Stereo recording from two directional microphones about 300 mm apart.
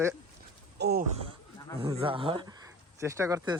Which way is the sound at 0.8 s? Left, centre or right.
Right.